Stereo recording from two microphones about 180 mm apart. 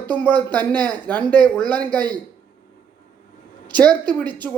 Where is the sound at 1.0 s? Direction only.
10° left (ahead or behind).